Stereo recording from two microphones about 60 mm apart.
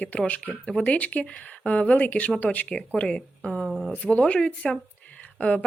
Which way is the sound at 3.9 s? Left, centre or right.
Left.